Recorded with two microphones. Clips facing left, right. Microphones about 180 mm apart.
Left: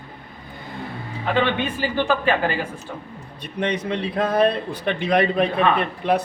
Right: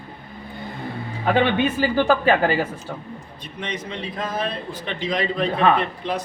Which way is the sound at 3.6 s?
65° left (ahead or behind).